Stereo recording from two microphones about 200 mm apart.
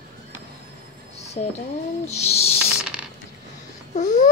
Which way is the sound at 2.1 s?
30° left (ahead or behind).